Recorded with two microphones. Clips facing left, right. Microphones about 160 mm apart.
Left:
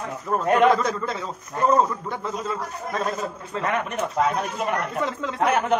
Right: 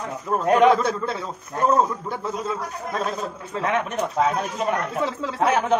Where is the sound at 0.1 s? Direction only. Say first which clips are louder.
Right 1 dB; centre (ahead or behind).